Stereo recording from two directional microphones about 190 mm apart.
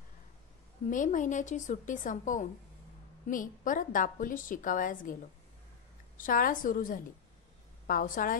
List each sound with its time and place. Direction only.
0.8 s a woman's voice: 45° left (ahead or behind)
6.1 s a woman's voice: 45° left (ahead or behind)